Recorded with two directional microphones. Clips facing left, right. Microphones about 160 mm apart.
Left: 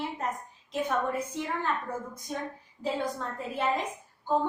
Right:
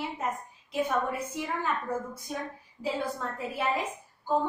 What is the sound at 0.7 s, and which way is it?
Speech, 10° right (ahead or behind).